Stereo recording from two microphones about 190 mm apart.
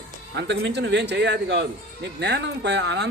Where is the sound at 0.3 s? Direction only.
65° right (ahead or behind).